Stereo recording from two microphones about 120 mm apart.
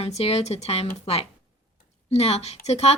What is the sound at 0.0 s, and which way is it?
Speech, 60° left (ahead or behind).